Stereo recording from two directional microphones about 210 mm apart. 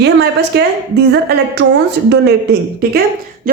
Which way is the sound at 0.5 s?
50° right (ahead or behind).